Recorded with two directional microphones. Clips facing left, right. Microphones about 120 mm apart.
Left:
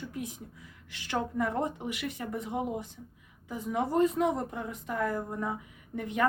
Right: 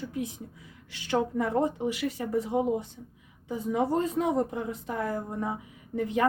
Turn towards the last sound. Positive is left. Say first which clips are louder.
# right 3 dB
turn(degrees=-30)  # may be behind; listen again after turning